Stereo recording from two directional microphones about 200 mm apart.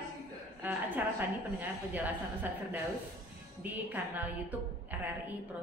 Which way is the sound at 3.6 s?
10° right (ahead or behind).